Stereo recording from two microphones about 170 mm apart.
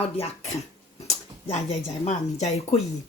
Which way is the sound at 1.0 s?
40° left (ahead or behind).